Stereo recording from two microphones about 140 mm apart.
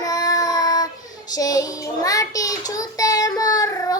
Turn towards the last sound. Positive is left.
turn(degrees=25)  # may be behind; listen again after turning